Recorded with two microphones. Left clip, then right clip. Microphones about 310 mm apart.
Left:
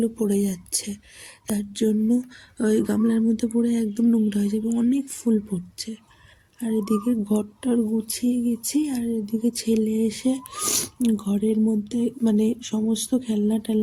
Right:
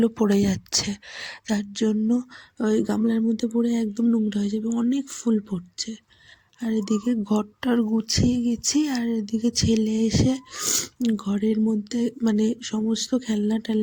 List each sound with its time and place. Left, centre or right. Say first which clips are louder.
0.3 s speech: right 2 dB; left
7.0 s speech: even; left